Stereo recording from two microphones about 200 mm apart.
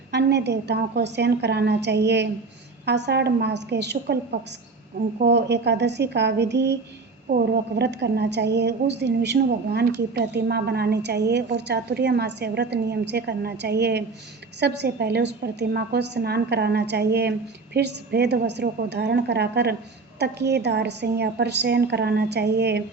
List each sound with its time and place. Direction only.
0.1 s a woman's voice: 55° right (ahead or behind)